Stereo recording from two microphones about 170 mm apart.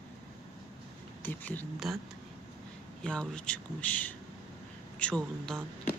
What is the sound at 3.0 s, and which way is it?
Speech, 5° left (ahead or behind).